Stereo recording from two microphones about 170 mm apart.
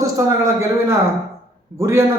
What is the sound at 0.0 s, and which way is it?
A man's voice, 15° right (ahead or behind).